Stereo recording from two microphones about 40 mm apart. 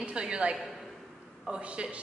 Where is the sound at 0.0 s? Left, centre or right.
Right.